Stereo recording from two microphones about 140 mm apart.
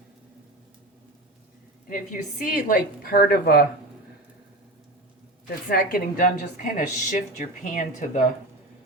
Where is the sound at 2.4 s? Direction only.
80° left.